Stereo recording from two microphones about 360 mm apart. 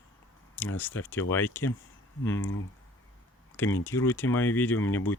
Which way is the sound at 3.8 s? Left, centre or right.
Centre.